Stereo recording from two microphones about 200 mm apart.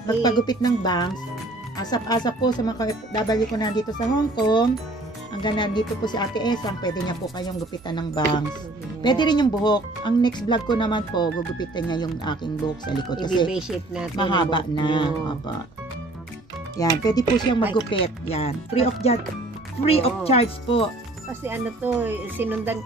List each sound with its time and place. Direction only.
0.0 s speech: 20° left (ahead or behind)
5.4 s speech: 20° left (ahead or behind)
13.5 s speech: 5° right (ahead or behind)
14.1 s speech: 25° left (ahead or behind)
16.7 s speech: 20° left (ahead or behind)
21.3 s speech: 10° right (ahead or behind)